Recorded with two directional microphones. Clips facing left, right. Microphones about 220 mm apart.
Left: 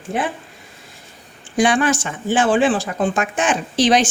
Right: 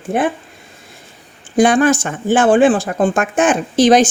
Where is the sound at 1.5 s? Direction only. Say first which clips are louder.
Right 5 dB; 45° right (ahead or behind).